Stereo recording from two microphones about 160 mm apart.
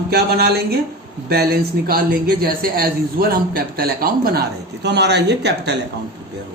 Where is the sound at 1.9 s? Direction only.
70° right (ahead or behind); by 5.7 s 90° right.